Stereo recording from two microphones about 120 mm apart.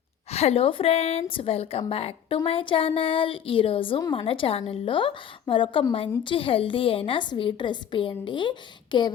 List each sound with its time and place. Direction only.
0.3 s a woman's voice: 60° left (ahead or behind); by 9.1 s 40° left (ahead or behind)